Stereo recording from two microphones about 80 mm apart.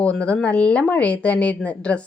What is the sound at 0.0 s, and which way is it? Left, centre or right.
A woman's voice, centre.